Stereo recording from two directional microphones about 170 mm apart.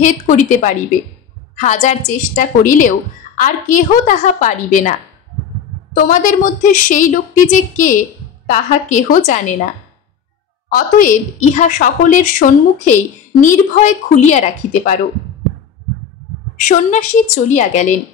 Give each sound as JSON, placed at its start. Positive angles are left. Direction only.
{"t": 0.0, "sound": "a woman's voice", "side_deg": 50}
{"t": 5.9, "sound": "a woman's voice", "side_deg": 50}
{"t": 10.7, "sound": "a woman's voice", "side_deg": 50}
{"t": 16.5, "sound": "a woman's voice", "side_deg": 50}